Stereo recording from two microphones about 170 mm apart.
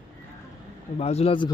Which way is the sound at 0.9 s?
40° left (ahead or behind).